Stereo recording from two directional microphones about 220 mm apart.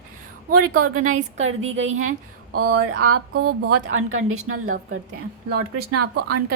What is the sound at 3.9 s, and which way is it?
Speech, 70° right (ahead or behind).